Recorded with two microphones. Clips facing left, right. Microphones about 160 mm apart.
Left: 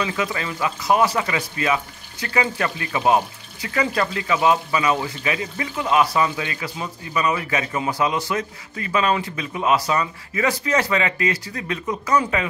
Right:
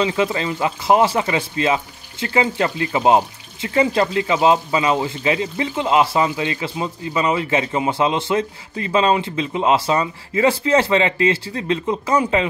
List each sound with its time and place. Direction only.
0.0 s speech: 25° right (ahead or behind)